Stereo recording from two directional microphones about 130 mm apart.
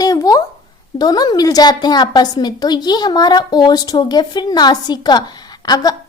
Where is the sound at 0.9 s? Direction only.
30° left (ahead or behind).